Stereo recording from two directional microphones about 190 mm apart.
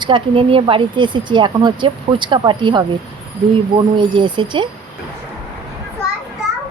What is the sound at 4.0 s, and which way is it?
Speech, 25° right (ahead or behind).